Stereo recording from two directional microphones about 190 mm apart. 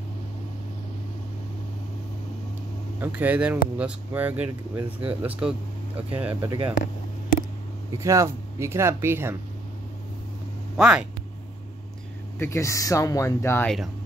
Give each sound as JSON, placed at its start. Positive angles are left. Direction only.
{"t": 3.0, "sound": "speech", "side_deg": -10}
{"t": 6.4, "sound": "speech", "side_deg": -25}
{"t": 6.8, "sound": "a sound", "side_deg": 45}
{"t": 8.0, "sound": "speech", "side_deg": -15}
{"t": 10.8, "sound": "speech", "side_deg": -5}
{"t": 12.4, "sound": "speech", "side_deg": 15}